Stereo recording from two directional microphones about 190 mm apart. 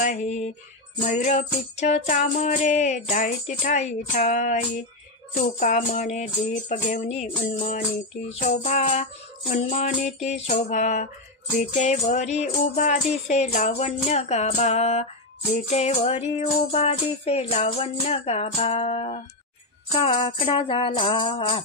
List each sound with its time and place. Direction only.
0.0 s music: 40° left (ahead or behind)